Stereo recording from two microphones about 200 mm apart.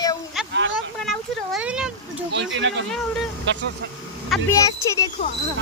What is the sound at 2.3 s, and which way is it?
Speech, 65° right (ahead or behind).